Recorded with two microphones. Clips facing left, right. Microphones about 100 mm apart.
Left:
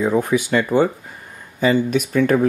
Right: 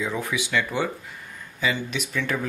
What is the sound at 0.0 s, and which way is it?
Speech, 45° left (ahead or behind).